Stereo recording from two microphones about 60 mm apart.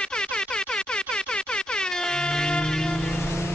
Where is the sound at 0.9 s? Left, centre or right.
Centre.